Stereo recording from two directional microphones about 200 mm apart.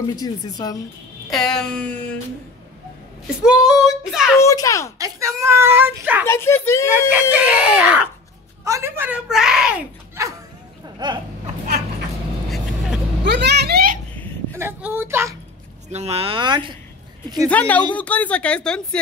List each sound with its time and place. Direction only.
0.1 s speech: 20° left (ahead or behind)
1.3 s speech: centre (ahead or behind)
3.4 s speech: centre (ahead or behind)
4.4 s a woman's voice: 15° left (ahead or behind)
4.9 s a child's voice: 15° right (ahead or behind)
6.2 s a woman's voice: 15° left (ahead or behind)
7.2 s a child's voice: 5° right (ahead or behind)
11.0 s speech: 20° right (ahead or behind)
13.2 s a child's voice: 60° right (ahead or behind)
14.1 s a sound: 10° left (ahead or behind)
14.6 s a child's voice: 10° right (ahead or behind)
15.9 s speech: 30° right (ahead or behind)
17.5 s a woman's voice: 5° left (ahead or behind)